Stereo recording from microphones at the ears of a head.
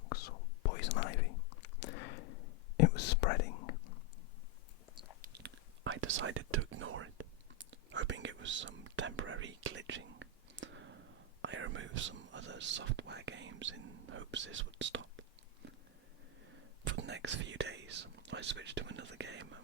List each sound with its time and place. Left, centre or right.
0.0 s whispering: left
5.3 s whispering: right
16.5 s whispering: right